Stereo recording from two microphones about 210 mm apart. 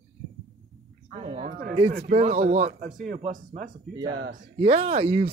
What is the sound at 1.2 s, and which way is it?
Speech, 25° right (ahead or behind).